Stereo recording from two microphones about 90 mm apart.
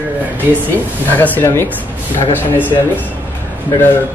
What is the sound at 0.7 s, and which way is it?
Speech, 20° left (ahead or behind).